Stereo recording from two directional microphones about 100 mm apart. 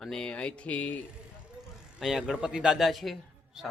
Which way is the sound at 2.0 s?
Centre (ahead or behind).